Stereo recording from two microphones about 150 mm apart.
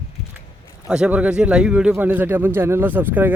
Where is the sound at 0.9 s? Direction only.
10° right (ahead or behind).